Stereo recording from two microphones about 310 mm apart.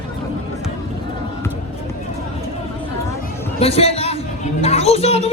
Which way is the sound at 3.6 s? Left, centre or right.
Centre.